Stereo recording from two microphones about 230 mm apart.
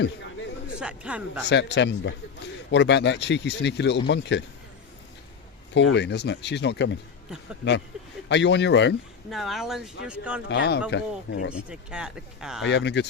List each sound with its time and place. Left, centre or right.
0.8 s speech: centre
1.5 s speech: left
5.7 s speech: left
8.3 s speech: left
9.3 s speech: centre
10.5 s speech: left
11.7 s speech: centre
12.6 s speech: left